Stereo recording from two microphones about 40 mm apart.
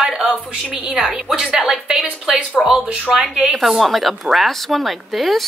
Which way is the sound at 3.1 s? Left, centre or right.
Centre.